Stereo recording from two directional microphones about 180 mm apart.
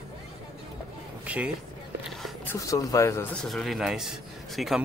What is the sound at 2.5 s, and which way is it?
Speech, 20° left (ahead or behind).